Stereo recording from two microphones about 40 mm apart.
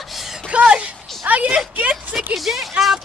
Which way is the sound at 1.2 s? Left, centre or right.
Right.